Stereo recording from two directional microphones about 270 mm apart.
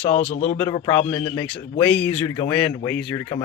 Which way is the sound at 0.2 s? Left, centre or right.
Left.